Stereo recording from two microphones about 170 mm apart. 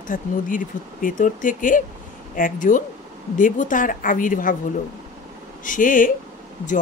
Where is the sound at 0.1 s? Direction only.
55° left (ahead or behind).